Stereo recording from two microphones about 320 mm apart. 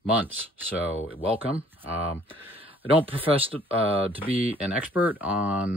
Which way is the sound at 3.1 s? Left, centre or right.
Centre.